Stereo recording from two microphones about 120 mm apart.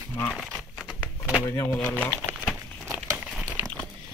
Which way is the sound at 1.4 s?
20° left (ahead or behind).